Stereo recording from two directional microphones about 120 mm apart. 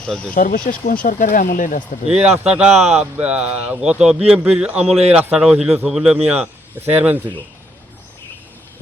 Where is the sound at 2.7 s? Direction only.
65° right (ahead or behind).